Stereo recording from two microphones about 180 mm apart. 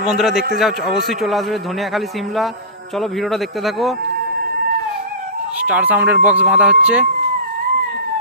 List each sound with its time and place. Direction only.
0.0 s a man's voice: centre (ahead or behind)
5.5 s speech: 10° right (ahead or behind)